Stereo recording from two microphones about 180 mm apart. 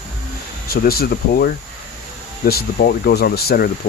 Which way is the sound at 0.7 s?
55° left (ahead or behind).